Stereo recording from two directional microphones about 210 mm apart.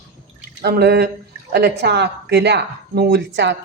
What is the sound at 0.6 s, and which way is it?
A woman's voice, 50° right (ahead or behind).